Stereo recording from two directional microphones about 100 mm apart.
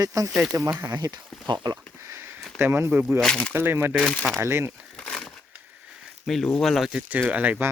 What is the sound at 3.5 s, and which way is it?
Speech, 25° right (ahead or behind).